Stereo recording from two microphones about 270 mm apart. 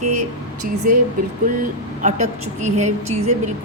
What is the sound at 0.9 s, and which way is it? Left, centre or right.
A woman's voice, right.